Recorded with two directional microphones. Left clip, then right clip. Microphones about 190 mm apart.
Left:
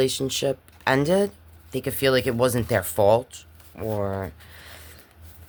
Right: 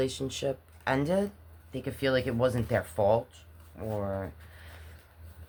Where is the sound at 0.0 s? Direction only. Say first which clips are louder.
Left 8 dB; 55° left (ahead or behind).